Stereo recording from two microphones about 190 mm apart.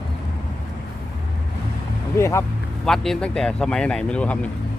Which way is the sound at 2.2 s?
15° left (ahead or behind).